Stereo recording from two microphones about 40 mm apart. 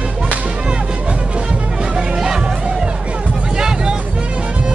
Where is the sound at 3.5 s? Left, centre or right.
Centre.